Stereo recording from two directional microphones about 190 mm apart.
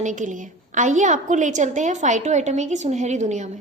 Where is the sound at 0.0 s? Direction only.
40° right (ahead or behind).